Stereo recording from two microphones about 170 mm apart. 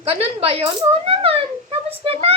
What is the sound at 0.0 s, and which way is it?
Speech, 35° right (ahead or behind).